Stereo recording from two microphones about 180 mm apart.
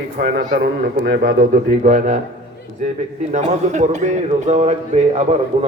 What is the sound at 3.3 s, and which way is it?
Music, 40° right (ahead or behind).